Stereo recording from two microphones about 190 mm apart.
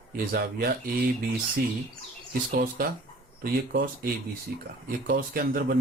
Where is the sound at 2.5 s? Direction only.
50° right (ahead or behind).